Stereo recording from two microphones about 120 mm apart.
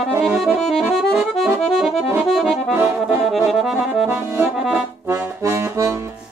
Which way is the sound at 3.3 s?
Centre (ahead or behind).